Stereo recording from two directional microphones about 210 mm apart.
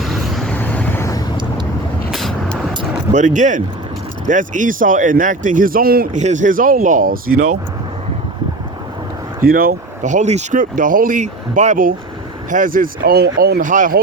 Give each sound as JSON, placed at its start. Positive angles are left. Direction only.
{"t": 0.0, "sound": "vehicle", "side_deg": 0}
{"t": 2.0, "sound": "vehicle", "side_deg": 0}
{"t": 3.1, "sound": "speech", "side_deg": -35}
{"t": 9.4, "sound": "speech", "side_deg": -45}